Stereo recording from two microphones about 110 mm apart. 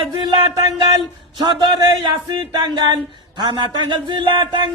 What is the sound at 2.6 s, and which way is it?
A man's voice, 45° right (ahead or behind).